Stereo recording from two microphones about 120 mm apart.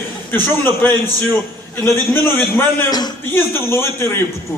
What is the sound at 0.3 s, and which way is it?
Speech, 15° left (ahead or behind).